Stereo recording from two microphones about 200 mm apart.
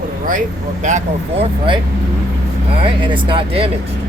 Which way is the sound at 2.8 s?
25° right (ahead or behind).